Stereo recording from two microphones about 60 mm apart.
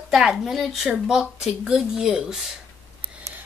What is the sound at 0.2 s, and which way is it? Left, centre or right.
Speech, centre.